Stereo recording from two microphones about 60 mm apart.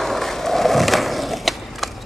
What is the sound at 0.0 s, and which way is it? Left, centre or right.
Skateboard, centre.